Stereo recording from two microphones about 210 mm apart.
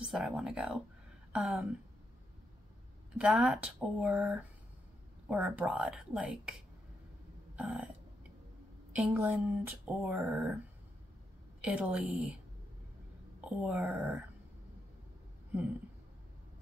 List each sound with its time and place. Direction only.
0.1 s speech: 5° right (ahead or behind)
3.2 s speech: 5° right (ahead or behind)
7.5 s speech: 5° right (ahead or behind)
8.9 s speech: 5° right (ahead or behind)
11.6 s speech: 5° right (ahead or behind)
13.5 s speech: 5° right (ahead or behind)